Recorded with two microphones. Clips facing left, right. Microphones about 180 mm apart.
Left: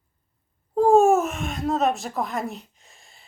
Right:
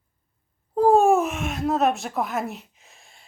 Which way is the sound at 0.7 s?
Centre (ahead or behind).